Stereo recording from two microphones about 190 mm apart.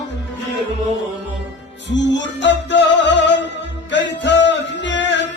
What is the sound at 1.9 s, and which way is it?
Music, 70° left (ahead or behind).